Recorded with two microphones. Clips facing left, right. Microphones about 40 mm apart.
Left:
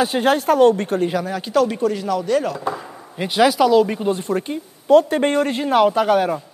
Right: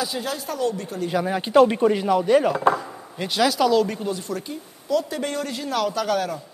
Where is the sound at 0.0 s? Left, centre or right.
Left.